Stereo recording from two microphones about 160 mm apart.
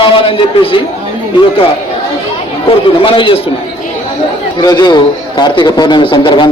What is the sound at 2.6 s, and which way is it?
Speech, 35° left (ahead or behind).